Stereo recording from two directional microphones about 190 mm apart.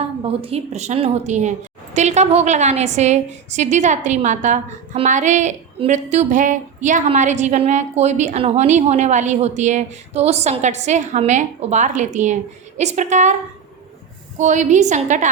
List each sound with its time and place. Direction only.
0.4 s a woman's voice: 35° right (ahead or behind)
14.3 s a woman's voice: 40° right (ahead or behind)